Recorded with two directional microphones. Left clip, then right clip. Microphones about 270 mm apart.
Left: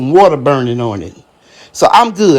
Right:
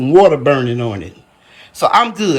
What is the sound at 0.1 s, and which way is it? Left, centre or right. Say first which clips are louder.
Speech: left 1 dB; centre.